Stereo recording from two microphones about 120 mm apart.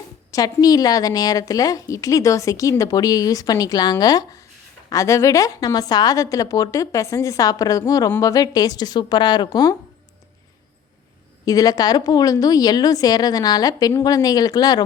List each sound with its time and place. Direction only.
0.3 s a woman's voice: 30° left (ahead or behind)
11.4 s a woman's voice: 30° left (ahead or behind)